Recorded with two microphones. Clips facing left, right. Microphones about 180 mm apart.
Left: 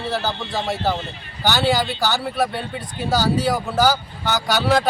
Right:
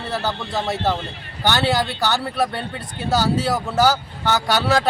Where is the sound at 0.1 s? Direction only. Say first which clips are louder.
Right 1 dB; centre (ahead or behind).